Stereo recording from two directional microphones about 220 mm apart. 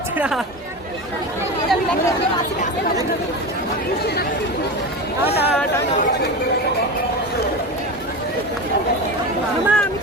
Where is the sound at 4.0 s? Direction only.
45° left (ahead or behind).